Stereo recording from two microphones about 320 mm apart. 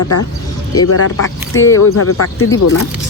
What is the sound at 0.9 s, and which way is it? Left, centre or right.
Speech, left.